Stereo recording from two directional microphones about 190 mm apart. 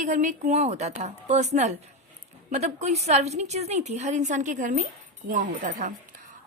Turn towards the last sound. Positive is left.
turn(degrees=-45)  # may be behind; listen again after turning